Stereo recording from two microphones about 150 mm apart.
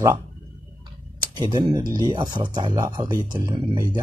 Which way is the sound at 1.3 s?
30° right (ahead or behind).